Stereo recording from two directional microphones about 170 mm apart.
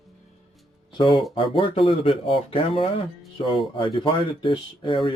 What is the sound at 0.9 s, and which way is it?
Speech, 30° left (ahead or behind).